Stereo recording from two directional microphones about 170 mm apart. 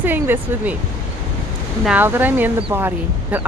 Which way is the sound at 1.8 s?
10° right (ahead or behind).